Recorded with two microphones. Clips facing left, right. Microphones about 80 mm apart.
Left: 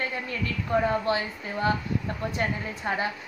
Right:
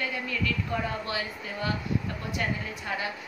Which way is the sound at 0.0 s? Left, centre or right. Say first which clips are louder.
Left 1 dB; left.